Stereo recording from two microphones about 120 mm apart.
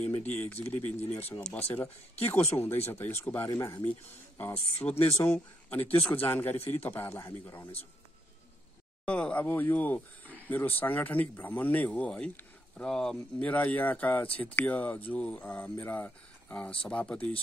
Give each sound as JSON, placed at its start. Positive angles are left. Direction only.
{"t": 0.0, "sound": "speech", "side_deg": 15}
{"t": 9.0, "sound": "speech", "side_deg": 10}